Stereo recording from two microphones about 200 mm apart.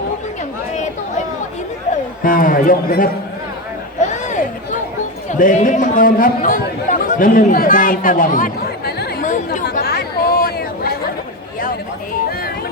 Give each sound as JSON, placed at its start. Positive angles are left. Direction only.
{"t": 2.2, "sound": "a man's voice", "side_deg": 45}
{"t": 4.0, "sound": "a sound", "side_deg": 35}
{"t": 5.3, "sound": "speech", "side_deg": 40}
{"t": 9.6, "sound": "chatter", "side_deg": 50}